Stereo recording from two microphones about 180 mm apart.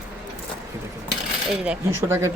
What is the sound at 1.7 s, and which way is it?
Speech, 15° right (ahead or behind).